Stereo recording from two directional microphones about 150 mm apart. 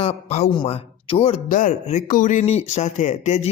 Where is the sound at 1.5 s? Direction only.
55° left (ahead or behind).